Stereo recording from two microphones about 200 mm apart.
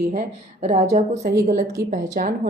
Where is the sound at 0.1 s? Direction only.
40° right (ahead or behind).